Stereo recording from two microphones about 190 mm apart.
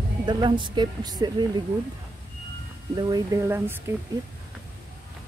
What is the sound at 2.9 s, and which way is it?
Speech, 20° right (ahead or behind).